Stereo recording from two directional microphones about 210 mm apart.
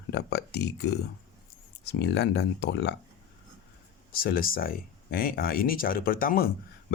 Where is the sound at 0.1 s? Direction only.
50° left (ahead or behind).